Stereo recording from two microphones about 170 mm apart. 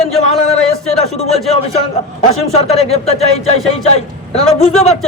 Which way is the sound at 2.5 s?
40° left (ahead or behind).